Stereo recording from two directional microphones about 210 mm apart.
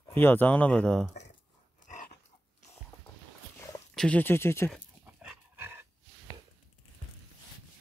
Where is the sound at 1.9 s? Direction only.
40° left (ahead or behind).